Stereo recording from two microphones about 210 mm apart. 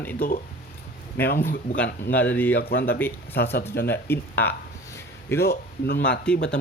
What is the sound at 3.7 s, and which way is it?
Speech, 50° left (ahead or behind).